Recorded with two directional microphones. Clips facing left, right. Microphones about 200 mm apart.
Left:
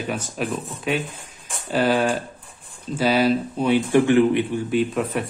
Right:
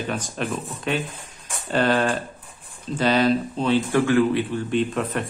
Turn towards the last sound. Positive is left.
turn(degrees=5)  # may be behind; listen again after turning